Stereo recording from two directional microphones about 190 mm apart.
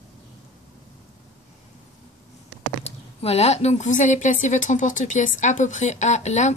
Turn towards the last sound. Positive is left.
turn(degrees=35)  # may be behind; listen again after turning